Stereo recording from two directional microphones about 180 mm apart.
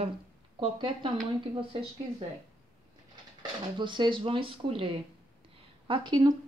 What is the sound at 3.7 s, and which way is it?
Speech, 25° right (ahead or behind).